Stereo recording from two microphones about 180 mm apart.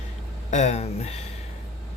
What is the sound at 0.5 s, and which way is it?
Speech, 40° left (ahead or behind).